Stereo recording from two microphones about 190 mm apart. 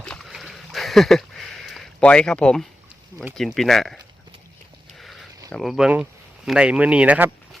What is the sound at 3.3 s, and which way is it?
Speech, centre (ahead or behind).